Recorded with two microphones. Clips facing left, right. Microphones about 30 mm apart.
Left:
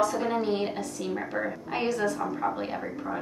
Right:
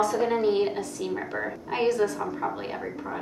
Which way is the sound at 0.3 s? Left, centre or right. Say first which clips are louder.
Right 4 dB; centre.